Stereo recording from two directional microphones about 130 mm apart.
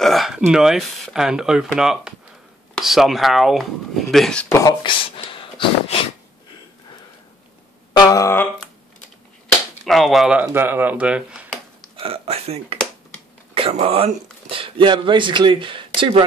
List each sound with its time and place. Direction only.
0.0 s speech: centre (ahead or behind)
4.5 s a sound: 25° left (ahead or behind)
4.8 s speech: 45° left (ahead or behind)
8.0 s a sound: 25° left (ahead or behind)
9.8 s speech: centre (ahead or behind)
10.4 s speech: 15° right (ahead or behind)
12.0 s speech: 50° right (ahead or behind)